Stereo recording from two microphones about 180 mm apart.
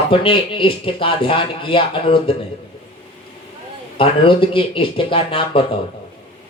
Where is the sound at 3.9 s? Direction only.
30° left (ahead or behind).